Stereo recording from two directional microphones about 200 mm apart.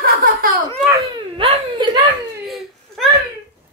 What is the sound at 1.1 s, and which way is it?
Baby cry, 25° right (ahead or behind).